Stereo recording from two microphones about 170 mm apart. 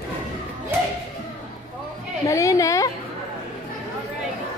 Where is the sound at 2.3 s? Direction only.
20° left (ahead or behind).